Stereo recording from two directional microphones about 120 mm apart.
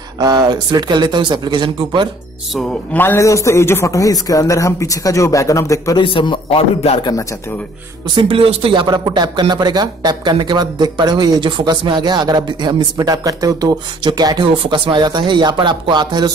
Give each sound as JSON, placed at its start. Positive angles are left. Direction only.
{"t": 0.2, "sound": "speech", "side_deg": -35}
{"t": 2.9, "sound": "a man's voice", "side_deg": 15}
{"t": 5.9, "sound": "a man's voice", "side_deg": 40}
{"t": 7.0, "sound": "a man's voice", "side_deg": 35}
{"t": 8.1, "sound": "speech", "side_deg": -45}
{"t": 8.8, "sound": "speech", "side_deg": -35}
{"t": 14.5, "sound": "speech", "side_deg": -45}